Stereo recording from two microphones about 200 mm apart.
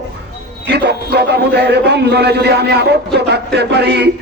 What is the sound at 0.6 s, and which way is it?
A man's voice, 55° right (ahead or behind).